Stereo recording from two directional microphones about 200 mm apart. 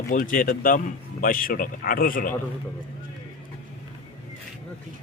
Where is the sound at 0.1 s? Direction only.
45° left (ahead or behind).